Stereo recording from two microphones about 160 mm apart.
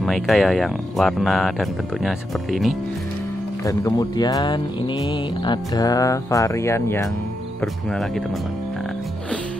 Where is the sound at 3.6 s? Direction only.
20° left (ahead or behind).